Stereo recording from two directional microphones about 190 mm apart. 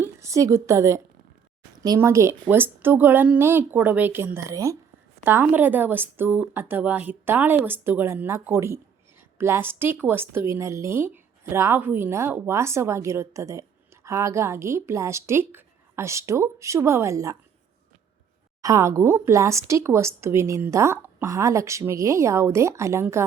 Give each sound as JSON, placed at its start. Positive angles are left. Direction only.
{"t": 0.0, "sound": "a woman's voice", "side_deg": -15}
{"t": 18.6, "sound": "a woman's voice", "side_deg": -15}